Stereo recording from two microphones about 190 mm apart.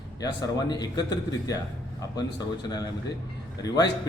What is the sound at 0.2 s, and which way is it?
A man's voice, 20° left (ahead or behind).